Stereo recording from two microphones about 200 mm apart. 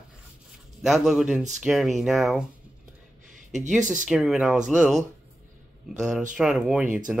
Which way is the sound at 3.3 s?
40° right (ahead or behind).